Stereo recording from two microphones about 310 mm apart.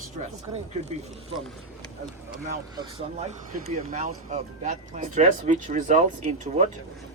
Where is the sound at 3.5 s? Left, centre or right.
Right.